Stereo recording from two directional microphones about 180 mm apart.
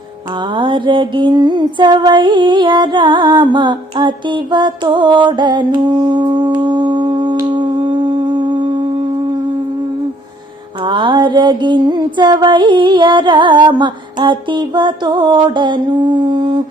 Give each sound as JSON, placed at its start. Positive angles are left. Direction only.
{"t": 0.5, "sound": "music", "side_deg": -25}
{"t": 10.8, "sound": "music", "side_deg": -25}